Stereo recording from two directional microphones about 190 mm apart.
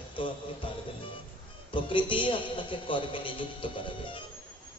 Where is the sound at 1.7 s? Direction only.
25° left (ahead or behind).